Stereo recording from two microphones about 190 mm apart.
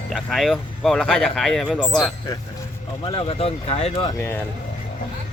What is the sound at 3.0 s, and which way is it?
Speech, 30° left (ahead or behind).